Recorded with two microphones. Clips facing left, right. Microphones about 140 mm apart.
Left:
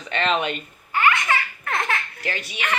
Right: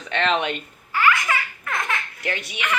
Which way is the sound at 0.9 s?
25° left (ahead or behind).